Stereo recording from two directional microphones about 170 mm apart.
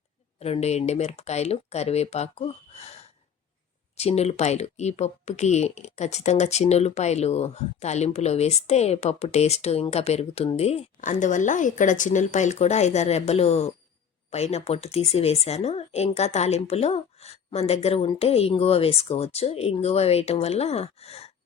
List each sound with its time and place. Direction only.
0.3 s a woman's voice: 35° left (ahead or behind)